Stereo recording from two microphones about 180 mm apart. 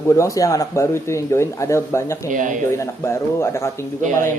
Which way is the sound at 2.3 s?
45° right (ahead or behind).